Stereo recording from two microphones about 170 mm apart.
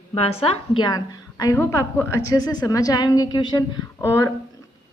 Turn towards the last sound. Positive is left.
turn(degrees=15)  # may be behind; listen again after turning